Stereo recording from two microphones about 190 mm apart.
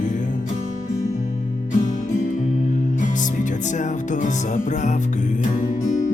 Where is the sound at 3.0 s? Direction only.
40° left (ahead or behind).